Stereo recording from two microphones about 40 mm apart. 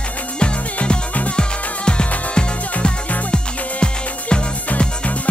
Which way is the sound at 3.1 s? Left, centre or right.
Left.